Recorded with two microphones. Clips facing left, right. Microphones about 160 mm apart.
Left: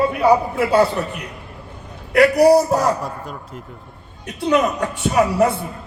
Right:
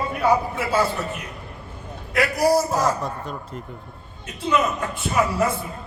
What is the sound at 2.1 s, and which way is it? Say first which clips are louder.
Speech: left 7 dB; 65° left (ahead or behind).